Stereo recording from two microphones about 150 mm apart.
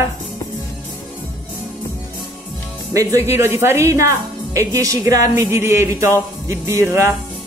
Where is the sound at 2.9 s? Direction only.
20° right (ahead or behind).